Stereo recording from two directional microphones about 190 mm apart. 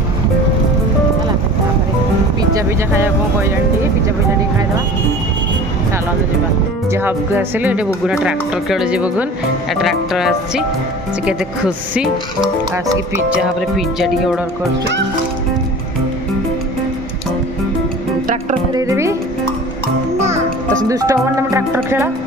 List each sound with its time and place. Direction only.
2.5 s speech: 15° right (ahead or behind)
6.9 s speech: 10° right (ahead or behind)
13.4 s speech: centre (ahead or behind)
18.2 s music: 40° right (ahead or behind)
18.7 s music: 15° right (ahead or behind)
20.9 s speech: 15° right (ahead or behind)